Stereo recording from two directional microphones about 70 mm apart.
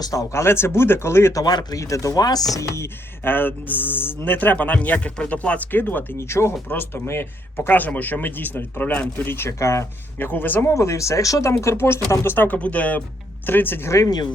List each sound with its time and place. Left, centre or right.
0.0 s speech: left
1.3 s chopping: left
1.7 s speech: left
2.1 s chopping: left
2.7 s speech: left
9.5 s speech: left
10.2 s speech: left
10.7 s speech: left